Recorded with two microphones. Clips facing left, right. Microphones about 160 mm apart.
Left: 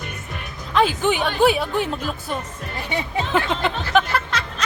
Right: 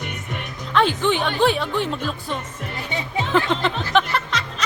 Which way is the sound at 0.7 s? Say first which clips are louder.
Even; 5° left (ahead or behind).